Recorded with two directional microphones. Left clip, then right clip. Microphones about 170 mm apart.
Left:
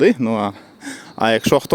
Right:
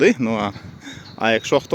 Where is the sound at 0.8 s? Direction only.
30° left (ahead or behind).